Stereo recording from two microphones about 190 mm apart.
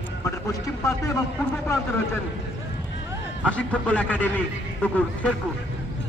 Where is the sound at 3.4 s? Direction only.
5° left (ahead or behind).